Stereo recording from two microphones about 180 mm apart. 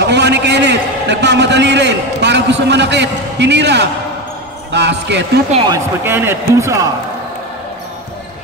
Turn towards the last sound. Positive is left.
turn(degrees=-15)  # may be behind; listen again after turning